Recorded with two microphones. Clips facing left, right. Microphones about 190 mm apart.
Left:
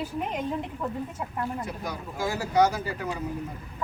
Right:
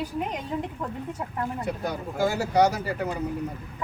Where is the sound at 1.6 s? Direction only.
65° right (ahead or behind).